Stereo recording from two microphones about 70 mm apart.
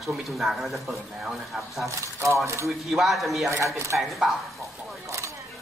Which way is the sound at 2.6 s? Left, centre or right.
Centre.